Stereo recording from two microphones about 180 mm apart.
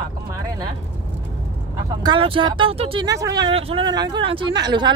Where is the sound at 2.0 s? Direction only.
30° right (ahead or behind).